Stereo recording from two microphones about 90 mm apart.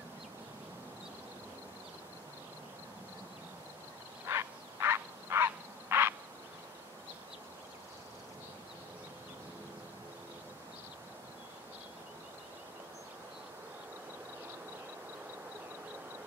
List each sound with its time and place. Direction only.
4.3 s frog: 30° right (ahead or behind)